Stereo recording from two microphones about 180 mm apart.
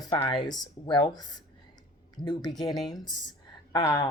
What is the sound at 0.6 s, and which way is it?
Speech, 25° left (ahead or behind).